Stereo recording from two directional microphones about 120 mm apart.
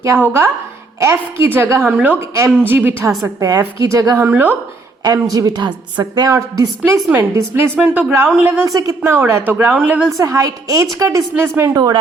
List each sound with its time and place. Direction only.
0.0 s a woman's voice: 20° right (ahead or behind)
4.2 s a woman's voice: 15° right (ahead or behind)
5.0 s a woman's voice: 30° right (ahead or behind)
8.6 s a woman's voice: 30° right (ahead or behind); by 10.1 s 10° right (ahead or behind)
10.2 s speech: 25° right (ahead or behind)